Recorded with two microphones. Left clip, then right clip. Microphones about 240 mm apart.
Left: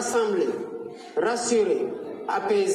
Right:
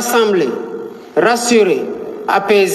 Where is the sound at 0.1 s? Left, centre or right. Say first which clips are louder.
Right 11 dB; right.